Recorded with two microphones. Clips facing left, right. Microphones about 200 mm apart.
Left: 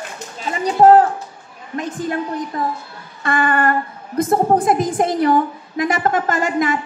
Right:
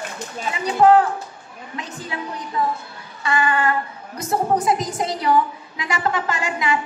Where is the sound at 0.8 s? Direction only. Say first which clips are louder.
Left 4 dB; 45° left (ahead or behind).